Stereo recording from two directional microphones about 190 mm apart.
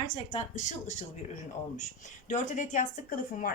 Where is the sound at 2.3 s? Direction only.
40° left (ahead or behind).